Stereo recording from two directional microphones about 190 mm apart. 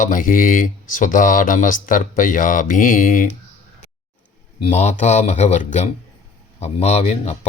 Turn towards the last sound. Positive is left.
turn(degrees=35)  # may be behind; listen again after turning